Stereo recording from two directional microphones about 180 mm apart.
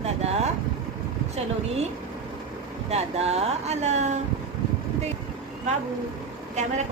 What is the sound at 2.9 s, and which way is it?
A woman's voice, 35° right (ahead or behind).